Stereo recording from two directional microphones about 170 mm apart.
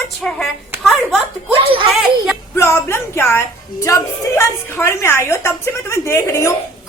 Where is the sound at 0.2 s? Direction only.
5° left (ahead or behind).